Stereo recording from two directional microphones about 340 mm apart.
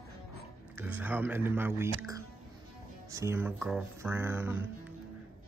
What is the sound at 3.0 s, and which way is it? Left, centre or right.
Speech, centre.